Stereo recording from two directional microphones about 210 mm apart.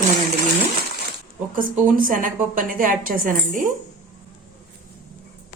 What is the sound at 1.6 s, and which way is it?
A woman's voice, 40° right (ahead or behind).